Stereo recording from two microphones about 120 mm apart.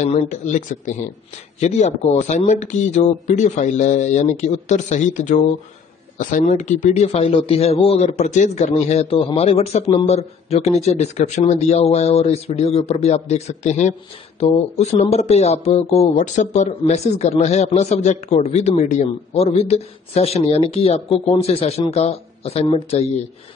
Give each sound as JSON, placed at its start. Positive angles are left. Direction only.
{"t": 0.0, "sound": "speech", "side_deg": 70}
{"t": 1.6, "sound": "a man's voice", "side_deg": 70}